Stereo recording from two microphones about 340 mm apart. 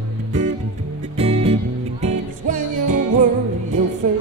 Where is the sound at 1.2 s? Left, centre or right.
Centre.